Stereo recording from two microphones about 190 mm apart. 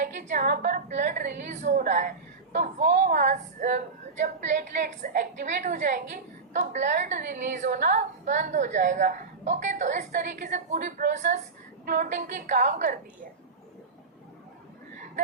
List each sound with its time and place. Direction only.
0.0 s a woman's voice: 45° right (ahead or behind)